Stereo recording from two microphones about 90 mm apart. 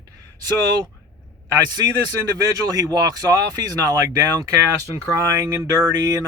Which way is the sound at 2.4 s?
40° right (ahead or behind).